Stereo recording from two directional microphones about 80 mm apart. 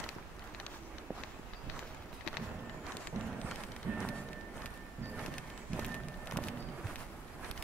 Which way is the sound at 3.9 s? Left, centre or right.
Right.